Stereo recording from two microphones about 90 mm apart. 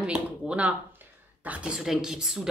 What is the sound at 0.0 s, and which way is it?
A woman's voice, 10° right (ahead or behind).